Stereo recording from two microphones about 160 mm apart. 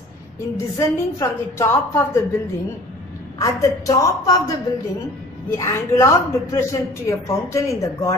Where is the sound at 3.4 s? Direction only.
20° left (ahead or behind).